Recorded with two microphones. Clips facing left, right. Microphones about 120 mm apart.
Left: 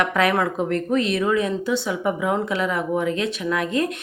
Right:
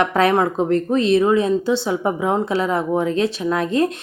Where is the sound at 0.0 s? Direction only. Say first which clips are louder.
Right 4 dB; 30° right (ahead or behind).